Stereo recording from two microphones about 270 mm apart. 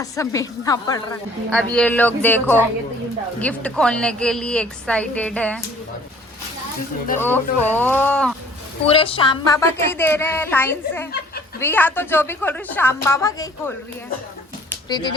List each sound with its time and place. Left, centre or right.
0.0 s a woman's voice: centre
7.2 s a woman's voice: centre
8.9 s a woman's voice: centre
14.8 s speech: centre